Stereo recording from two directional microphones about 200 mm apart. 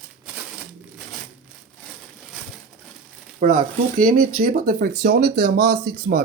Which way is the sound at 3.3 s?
45° right (ahead or behind).